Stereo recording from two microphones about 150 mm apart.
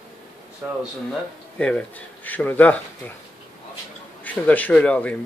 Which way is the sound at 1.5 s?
5° left (ahead or behind).